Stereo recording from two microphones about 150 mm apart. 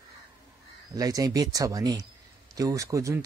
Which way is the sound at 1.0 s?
25° right (ahead or behind).